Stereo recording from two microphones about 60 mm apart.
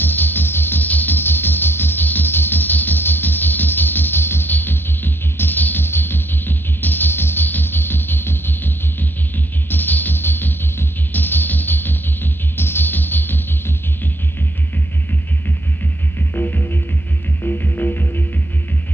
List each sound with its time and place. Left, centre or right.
0.0 s music: left
16.2 s music: left